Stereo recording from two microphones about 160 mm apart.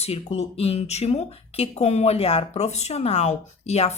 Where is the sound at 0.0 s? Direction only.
40° left (ahead or behind).